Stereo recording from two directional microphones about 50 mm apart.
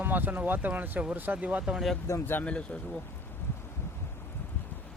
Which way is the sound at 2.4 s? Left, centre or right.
Left.